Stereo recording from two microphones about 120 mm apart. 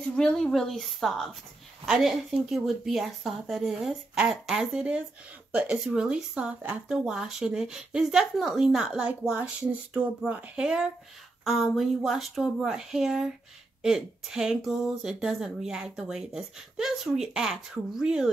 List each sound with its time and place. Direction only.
0.1 s speech: 5° left (ahead or behind)